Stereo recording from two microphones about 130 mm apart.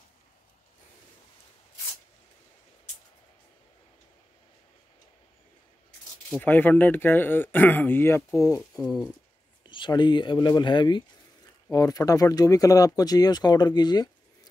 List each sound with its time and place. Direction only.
6.4 s speech: 15° left (ahead or behind)
8.5 s speech: centre (ahead or behind)
9.6 s speech: 35° left (ahead or behind)